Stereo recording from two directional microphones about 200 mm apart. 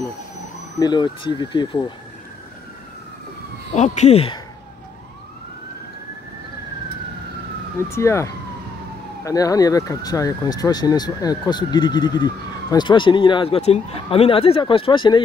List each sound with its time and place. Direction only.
0.7 s speech: 20° left (ahead or behind)
3.7 s speech: 35° left (ahead or behind)
7.9 s speech: 15° left (ahead or behind)